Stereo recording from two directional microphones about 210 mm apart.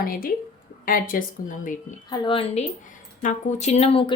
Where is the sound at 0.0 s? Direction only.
45° left (ahead or behind).